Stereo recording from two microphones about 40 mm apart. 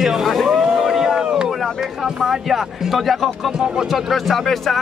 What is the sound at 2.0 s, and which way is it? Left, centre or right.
Speech, centre.